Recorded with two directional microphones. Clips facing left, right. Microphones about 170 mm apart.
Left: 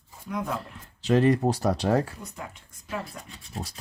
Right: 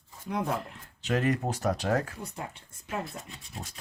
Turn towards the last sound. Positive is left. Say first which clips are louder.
# left 6 dB
turn(degrees=35)  # may be behind; listen again after turning